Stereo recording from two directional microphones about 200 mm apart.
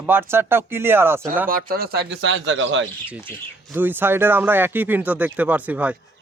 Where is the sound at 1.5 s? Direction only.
45° right (ahead or behind).